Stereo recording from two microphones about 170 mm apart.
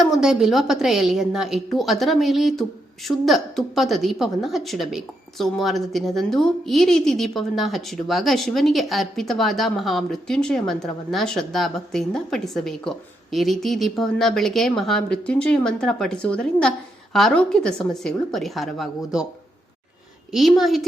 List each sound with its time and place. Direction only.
0.0 s a woman's voice: centre (ahead or behind)
20.3 s a woman's voice: centre (ahead or behind)